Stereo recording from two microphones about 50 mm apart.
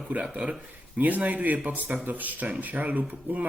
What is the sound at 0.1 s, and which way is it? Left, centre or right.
Speech, right.